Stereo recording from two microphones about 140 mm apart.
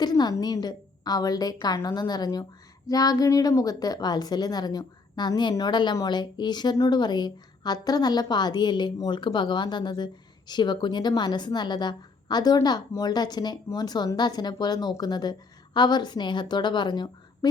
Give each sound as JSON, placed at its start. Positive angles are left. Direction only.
{"t": 0.0, "sound": "a woman's voice", "side_deg": 30}